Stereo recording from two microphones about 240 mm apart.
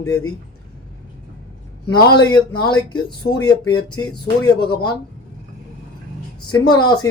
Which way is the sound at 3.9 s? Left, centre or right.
Centre.